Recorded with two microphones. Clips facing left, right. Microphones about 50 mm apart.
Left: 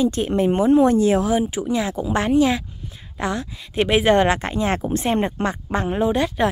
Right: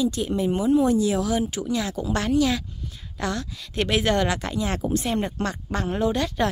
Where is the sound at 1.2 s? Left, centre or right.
Left.